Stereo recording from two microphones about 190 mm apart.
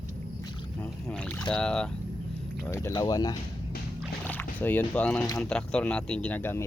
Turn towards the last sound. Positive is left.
turn(degrees=10)  # may be behind; listen again after turning